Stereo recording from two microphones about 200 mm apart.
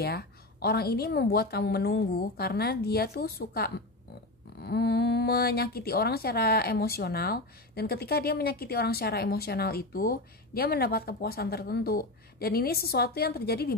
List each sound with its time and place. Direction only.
0.0 s speech: 50° left (ahead or behind)